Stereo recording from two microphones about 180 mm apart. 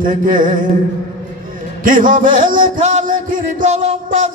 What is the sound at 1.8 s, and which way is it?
Mantra, 50° right (ahead or behind).